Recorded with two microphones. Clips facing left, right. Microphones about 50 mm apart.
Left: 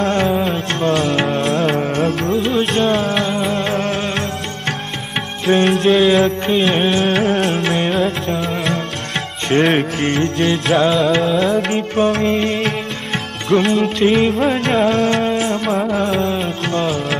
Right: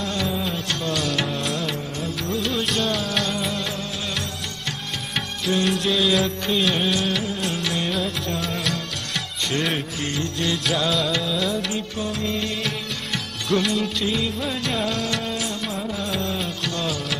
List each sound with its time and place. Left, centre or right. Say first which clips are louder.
0.0 s music: left 9 dB; left
2.3 s music: left 5 dB; left
2.6 s music: left 8 dB; left
5.5 s music: left 9 dB; left
8.4 s music: left 6 dB; left
9.5 s music: left 11 dB; left
13.7 s music: left 10 dB; left